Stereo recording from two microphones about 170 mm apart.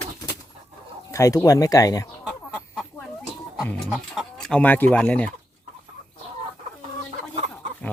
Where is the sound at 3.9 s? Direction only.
Centre (ahead or behind).